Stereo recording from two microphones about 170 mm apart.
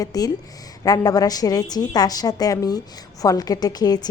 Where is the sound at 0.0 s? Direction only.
20° left (ahead or behind).